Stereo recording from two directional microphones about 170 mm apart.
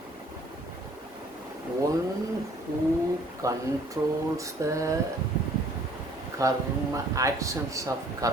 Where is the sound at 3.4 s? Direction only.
20° right (ahead or behind).